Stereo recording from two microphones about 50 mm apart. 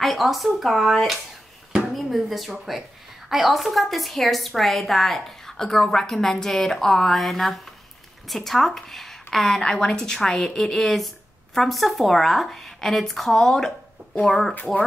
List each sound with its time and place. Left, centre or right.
0.0 s a woman's voice: centre